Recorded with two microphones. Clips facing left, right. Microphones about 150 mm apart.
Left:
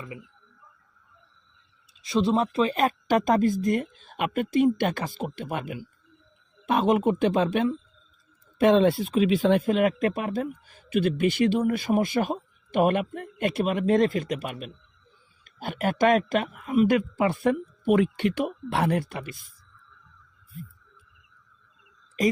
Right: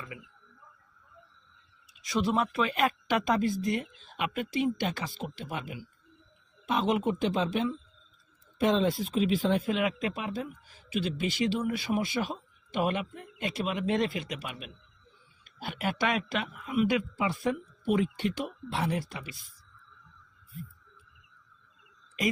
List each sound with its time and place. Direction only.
0.1 s speech: 30° left (ahead or behind)
1.9 s speech: 25° left (ahead or behind); by 9.6 s 70° left (ahead or behind)
9.6 s speech: 50° left (ahead or behind)